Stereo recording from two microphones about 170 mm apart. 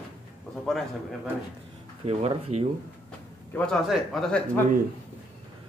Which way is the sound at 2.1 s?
35° right (ahead or behind).